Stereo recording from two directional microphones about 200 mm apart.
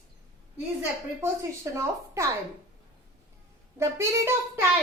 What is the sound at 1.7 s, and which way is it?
Speech, 15° right (ahead or behind).